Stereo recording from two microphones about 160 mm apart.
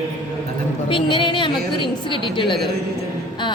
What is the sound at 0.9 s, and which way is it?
A woman's voice, 30° left (ahead or behind).